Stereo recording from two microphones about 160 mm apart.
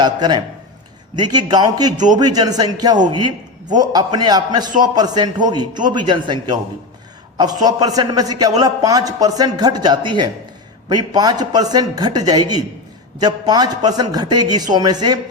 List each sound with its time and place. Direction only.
0.0 s a man's voice: 25° right (ahead or behind)